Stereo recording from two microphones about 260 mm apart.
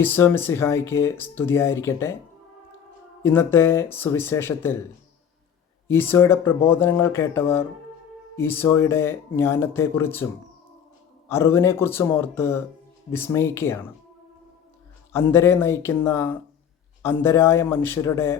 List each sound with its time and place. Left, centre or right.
0.0 s speech: centre
3.2 s speech: centre
5.9 s speech: centre
11.3 s speech: centre
15.1 s speech: centre